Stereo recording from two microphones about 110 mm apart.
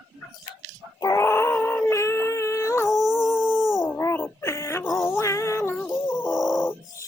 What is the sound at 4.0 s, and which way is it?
Wail, 20° left (ahead or behind).